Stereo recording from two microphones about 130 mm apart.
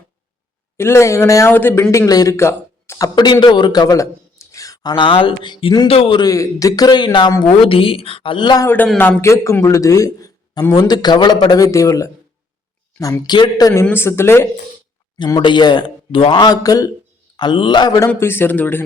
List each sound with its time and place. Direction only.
0.8 s a man's voice: 20° left (ahead or behind)
3.4 s a man's voice: 35° left (ahead or behind)
6.2 s speech: 25° left (ahead or behind)
8.6 s a man's voice: 15° left (ahead or behind); by 11.5 s 40° left (ahead or behind)
11.5 s a man's voice: 25° left (ahead or behind)
13.8 s a man's voice: 15° left (ahead or behind)
15.2 s speech: 35° left (ahead or behind)
18.1 s a man's voice: 15° left (ahead or behind)